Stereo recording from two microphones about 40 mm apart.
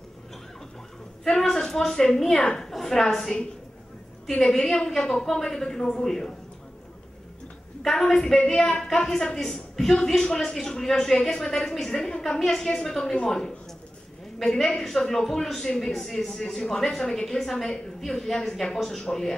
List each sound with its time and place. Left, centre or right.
1.2 s a woman's voice: centre
7.8 s a woman's voice: centre
14.4 s a woman's voice: centre